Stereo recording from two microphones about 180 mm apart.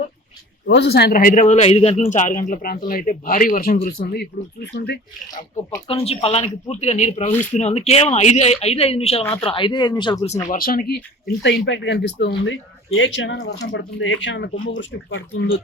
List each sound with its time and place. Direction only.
0.7 s a man's voice: 70° left (ahead or behind)
5.9 s speech: 30° left (ahead or behind)
10.5 s speech: 50° left (ahead or behind); by 15.6 s 90° left